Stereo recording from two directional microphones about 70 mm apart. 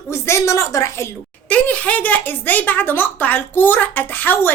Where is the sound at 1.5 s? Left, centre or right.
Centre.